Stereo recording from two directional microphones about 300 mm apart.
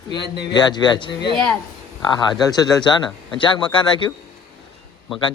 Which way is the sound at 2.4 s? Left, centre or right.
Centre.